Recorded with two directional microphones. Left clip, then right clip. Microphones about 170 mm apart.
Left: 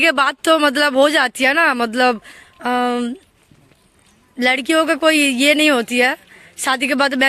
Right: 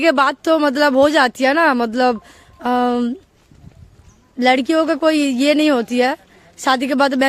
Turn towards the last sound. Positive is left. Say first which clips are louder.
# right 1 dB
turn(degrees=-15)  # may be behind; listen again after turning